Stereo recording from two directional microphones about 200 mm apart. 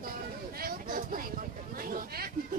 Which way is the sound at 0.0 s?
50° right (ahead or behind).